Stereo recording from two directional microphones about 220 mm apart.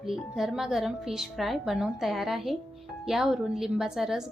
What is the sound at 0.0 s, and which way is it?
Speech, centre (ahead or behind).